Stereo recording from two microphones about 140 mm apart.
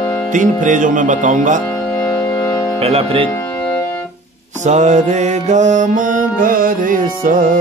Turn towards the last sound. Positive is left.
turn(degrees=-80)